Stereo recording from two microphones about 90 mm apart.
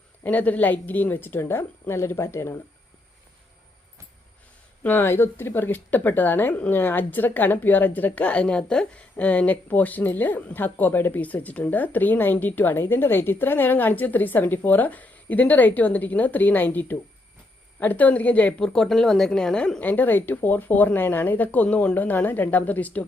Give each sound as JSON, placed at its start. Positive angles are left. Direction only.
{"t": 0.2, "sound": "speech", "side_deg": 20}
{"t": 4.8, "sound": "a woman's voice", "side_deg": 20}